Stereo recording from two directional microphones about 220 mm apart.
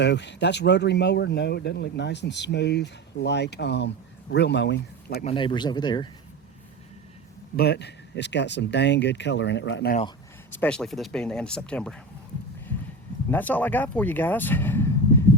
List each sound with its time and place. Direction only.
0.0 s speech: 55° left (ahead or behind)
5.2 s speech: 25° left (ahead or behind)
7.5 s speech: 45° left (ahead or behind)
10.6 s speech: 5° left (ahead or behind)
13.3 s speech: 5° left (ahead or behind)